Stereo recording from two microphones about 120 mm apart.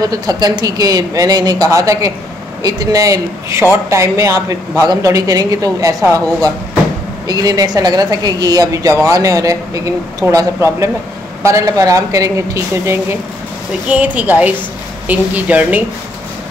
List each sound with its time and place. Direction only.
0.0 s a woman's voice: 30° right (ahead or behind)
13.8 s speech: 10° right (ahead or behind)